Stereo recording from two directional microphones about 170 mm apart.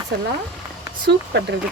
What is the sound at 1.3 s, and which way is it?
Speech, 90° right.